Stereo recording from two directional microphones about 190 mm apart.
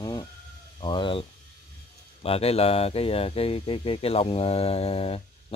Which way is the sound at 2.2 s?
30° left (ahead or behind).